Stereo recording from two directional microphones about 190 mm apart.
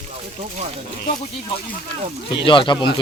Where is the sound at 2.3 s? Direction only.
25° left (ahead or behind).